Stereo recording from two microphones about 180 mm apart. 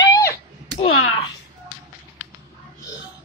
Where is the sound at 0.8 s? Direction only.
30° left (ahead or behind).